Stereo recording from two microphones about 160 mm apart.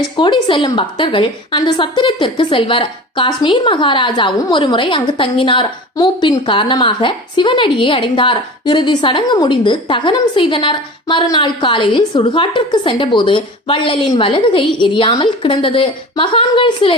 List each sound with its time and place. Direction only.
0.2 s a woman's voice: 30° left (ahead or behind)